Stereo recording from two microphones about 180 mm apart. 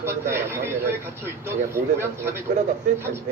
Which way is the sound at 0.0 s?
15° right (ahead or behind).